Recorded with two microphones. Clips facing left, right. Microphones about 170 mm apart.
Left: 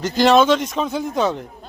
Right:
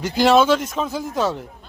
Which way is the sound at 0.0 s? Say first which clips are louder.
Left 1 dB; 10° right (ahead or behind).